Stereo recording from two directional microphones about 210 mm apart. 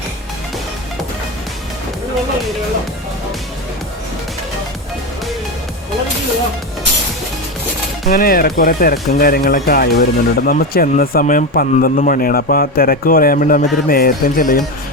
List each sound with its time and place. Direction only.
8.1 s speech: 45° left (ahead or behind)